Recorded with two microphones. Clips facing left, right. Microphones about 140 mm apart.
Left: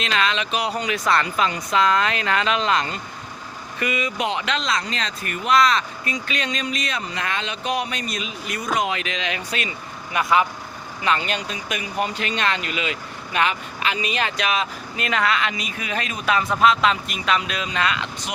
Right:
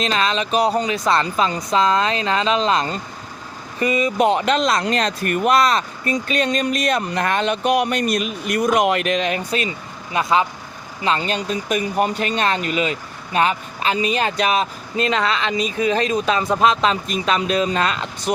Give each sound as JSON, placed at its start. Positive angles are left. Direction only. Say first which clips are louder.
{"t": 0.0, "sound": "speech", "louder": "right 3 dB", "side_deg": -35}
{"t": 5.6, "sound": "speech", "louder": "right 2 dB", "side_deg": -40}